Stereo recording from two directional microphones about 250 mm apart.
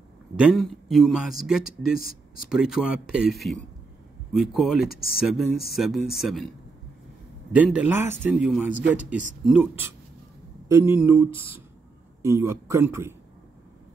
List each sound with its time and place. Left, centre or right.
0.4 s a man's voice: centre
4.8 s speech: left
5.2 s a man's voice: centre
7.5 s a man's voice: centre